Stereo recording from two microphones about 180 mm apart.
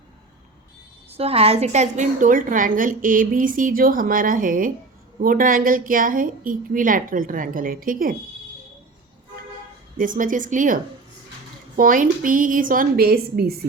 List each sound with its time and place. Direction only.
1.1 s a woman's voice: 35° right (ahead or behind); by 8.1 s 55° right (ahead or behind)
10.0 s a woman's voice: 45° right (ahead or behind)
11.8 s a woman's voice: 50° right (ahead or behind)